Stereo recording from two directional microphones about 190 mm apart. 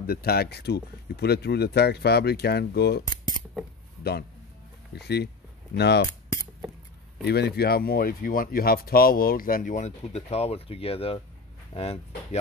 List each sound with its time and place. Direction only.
0.0 s speech: 55° left (ahead or behind)
4.0 s a man's voice: 60° left (ahead or behind)
7.2 s speech: 60° left (ahead or behind); by 12.4 s 35° left (ahead or behind)